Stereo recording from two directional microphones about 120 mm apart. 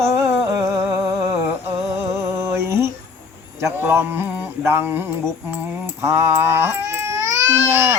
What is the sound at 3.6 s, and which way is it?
Mantra, 20° right (ahead or behind).